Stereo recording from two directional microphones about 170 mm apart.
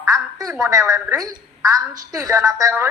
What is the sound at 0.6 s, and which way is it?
A woman's voice, 20° right (ahead or behind).